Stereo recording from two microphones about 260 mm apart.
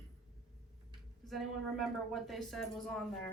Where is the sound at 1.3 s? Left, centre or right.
Centre.